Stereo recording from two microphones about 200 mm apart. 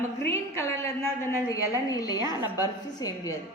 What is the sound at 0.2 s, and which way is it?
A woman's voice, 15° left (ahead or behind).